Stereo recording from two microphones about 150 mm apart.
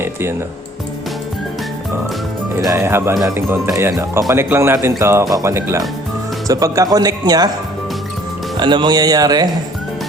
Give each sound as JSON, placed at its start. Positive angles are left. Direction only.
{"t": 0.0, "sound": "speech", "side_deg": -15}
{"t": 2.6, "sound": "speech", "side_deg": -20}
{"t": 8.5, "sound": "speech", "side_deg": -30}